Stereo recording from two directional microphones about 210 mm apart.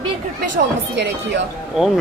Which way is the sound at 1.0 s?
60° right (ahead or behind).